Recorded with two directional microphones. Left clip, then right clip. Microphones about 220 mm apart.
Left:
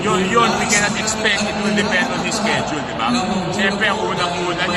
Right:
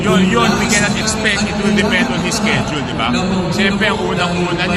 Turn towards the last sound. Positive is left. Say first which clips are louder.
# right 2 dB
turn(degrees=-5)  # may be behind; listen again after turning